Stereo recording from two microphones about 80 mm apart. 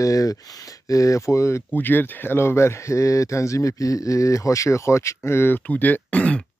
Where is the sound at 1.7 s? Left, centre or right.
Left.